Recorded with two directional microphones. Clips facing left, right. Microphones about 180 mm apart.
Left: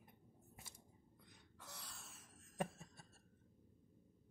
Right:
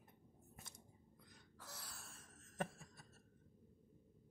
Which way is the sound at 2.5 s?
15° left (ahead or behind).